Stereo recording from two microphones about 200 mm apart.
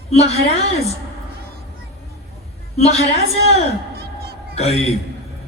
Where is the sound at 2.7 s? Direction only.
30° left (ahead or behind).